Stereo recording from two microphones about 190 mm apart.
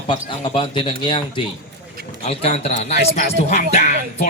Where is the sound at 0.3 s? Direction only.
25° left (ahead or behind).